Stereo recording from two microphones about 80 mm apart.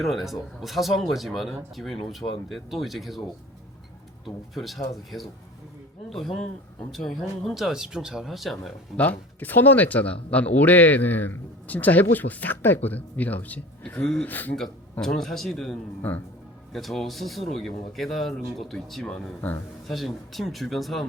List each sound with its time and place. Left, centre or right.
0.0 s speech: centre
4.5 s speech: centre
9.0 s speech: left
15.0 s speech: centre
16.0 s speech: left
16.7 s speech: centre